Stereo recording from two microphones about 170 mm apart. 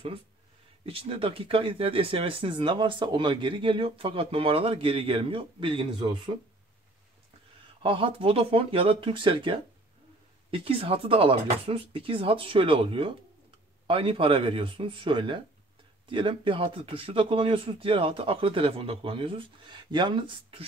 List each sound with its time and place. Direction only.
0.8 s speech: 35° right (ahead or behind)
7.6 s speech: 30° right (ahead or behind)